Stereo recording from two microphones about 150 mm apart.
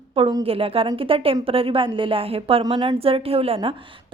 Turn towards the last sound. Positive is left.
turn(degrees=-40)  # may be behind; listen again after turning